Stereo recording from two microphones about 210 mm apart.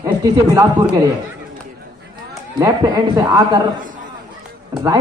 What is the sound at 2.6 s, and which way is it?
Speech, 15° right (ahead or behind).